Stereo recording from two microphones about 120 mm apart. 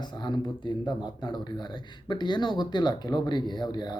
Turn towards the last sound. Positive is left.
turn(degrees=35)  # may be behind; listen again after turning